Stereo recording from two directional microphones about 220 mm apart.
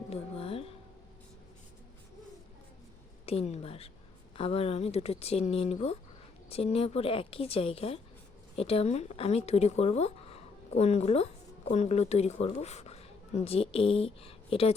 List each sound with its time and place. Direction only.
0.1 s music: 25° left (ahead or behind)
3.2 s speech: 30° left (ahead or behind)